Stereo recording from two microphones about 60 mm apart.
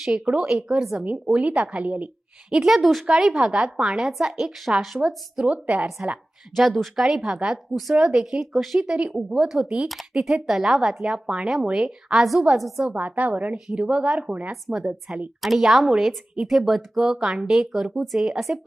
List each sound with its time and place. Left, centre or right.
0.0 s a woman's voice: centre
1.4 s a woman's voice: right
2.5 s a woman's voice: centre
5.5 s a woman's voice: right
6.6 s a woman's voice: centre
7.7 s a woman's voice: centre
9.9 s a woman's voice: centre
13.0 s a woman's voice: right; by 18.6 s centre